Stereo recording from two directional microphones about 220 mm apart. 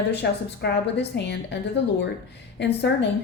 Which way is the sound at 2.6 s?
50° left (ahead or behind).